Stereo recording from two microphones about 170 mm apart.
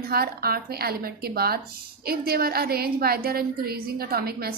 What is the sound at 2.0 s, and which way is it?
A woman's voice, 65° right (ahead or behind).